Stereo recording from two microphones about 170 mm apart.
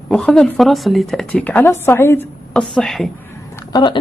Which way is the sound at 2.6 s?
Centre (ahead or behind).